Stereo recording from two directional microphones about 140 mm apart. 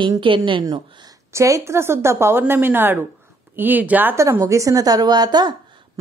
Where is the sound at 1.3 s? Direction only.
20° right (ahead or behind).